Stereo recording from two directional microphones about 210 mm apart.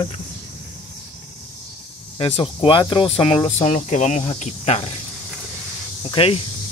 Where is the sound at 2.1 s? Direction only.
25° left (ahead or behind).